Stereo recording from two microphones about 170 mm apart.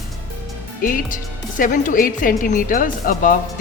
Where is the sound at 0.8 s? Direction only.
55° left (ahead or behind).